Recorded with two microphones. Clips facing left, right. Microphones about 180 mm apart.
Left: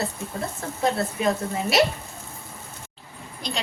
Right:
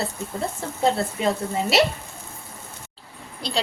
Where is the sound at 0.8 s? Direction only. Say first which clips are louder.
Right 2 dB; 25° right (ahead or behind).